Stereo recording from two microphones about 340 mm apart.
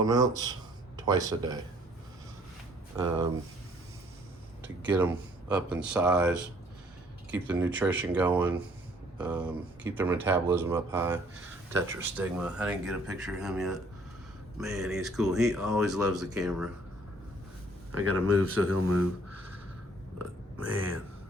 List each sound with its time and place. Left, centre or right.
0.0 s a man's voice: centre
2.9 s a man's voice: centre
4.8 s speech: centre
17.9 s speech: right
20.6 s speech: right